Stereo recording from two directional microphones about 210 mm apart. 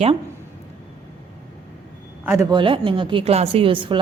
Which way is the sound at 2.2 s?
10° right (ahead or behind).